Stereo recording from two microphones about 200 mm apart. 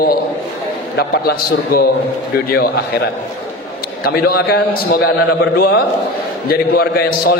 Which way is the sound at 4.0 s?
50° left (ahead or behind).